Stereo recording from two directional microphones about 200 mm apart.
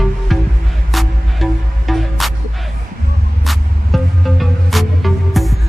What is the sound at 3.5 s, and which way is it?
Music, centre (ahead or behind).